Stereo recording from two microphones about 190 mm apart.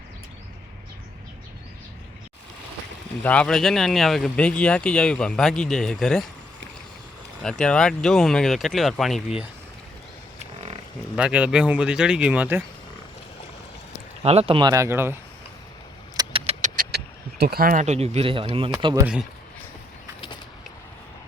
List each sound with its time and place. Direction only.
3.2 s speech: 5° left (ahead or behind)
7.4 s speech: 5° left (ahead or behind)
11.2 s speech: 5° right (ahead or behind)
14.2 s speech: 30° right (ahead or behind)
14.7 s speech: 15° right (ahead or behind)
16.1 s keys jangling: 30° right (ahead or behind)
16.9 s speech: 55° right (ahead or behind); by 19.0 s 20° right (ahead or behind)